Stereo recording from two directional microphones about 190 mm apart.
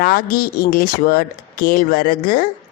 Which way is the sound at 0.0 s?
50° left (ahead or behind).